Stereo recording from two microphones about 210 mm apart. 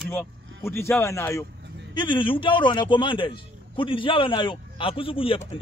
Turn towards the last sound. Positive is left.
turn(degrees=25)  # may be behind; listen again after turning